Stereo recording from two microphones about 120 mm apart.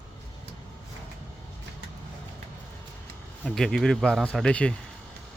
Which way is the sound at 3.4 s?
5° left (ahead or behind).